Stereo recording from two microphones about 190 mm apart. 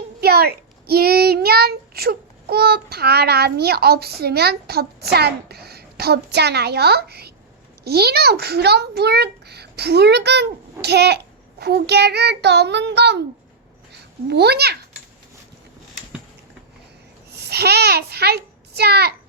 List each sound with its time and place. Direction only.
0.2 s a child's voice: 55° right (ahead or behind)
14.3 s a child's voice: 60° right (ahead or behind)
17.3 s a child's voice: 60° right (ahead or behind)